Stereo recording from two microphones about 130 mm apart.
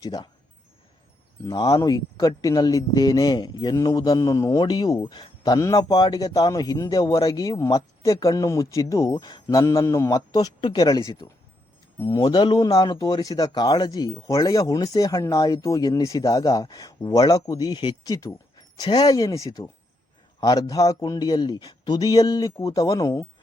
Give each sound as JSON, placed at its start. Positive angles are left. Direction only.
{"t": 0.0, "sound": "speech", "side_deg": 30}
{"t": 1.5, "sound": "a man's voice", "side_deg": 30}
{"t": 12.2, "sound": "a man's voice", "side_deg": 35}